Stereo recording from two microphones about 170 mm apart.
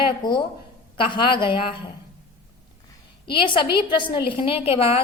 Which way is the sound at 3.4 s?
30° left (ahead or behind).